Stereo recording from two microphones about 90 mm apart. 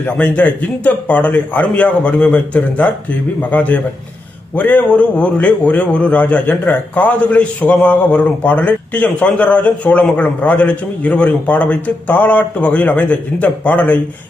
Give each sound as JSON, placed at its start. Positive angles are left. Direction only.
{"t": 0.0, "sound": "a man's voice", "side_deg": 15}